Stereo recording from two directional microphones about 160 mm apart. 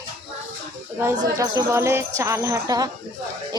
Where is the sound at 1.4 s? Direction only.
20° right (ahead or behind).